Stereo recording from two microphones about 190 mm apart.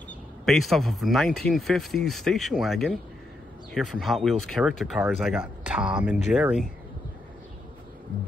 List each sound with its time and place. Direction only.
0.5 s speech: centre (ahead or behind)